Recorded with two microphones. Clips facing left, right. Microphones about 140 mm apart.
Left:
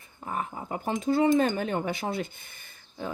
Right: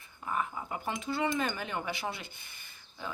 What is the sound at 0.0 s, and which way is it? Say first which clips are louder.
Speech: left 1 dB; 40° left (ahead or behind).